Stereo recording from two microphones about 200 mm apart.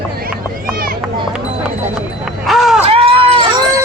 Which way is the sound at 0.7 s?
45° right (ahead or behind).